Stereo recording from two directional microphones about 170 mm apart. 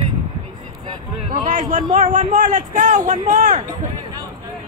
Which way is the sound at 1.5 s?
50° right (ahead or behind).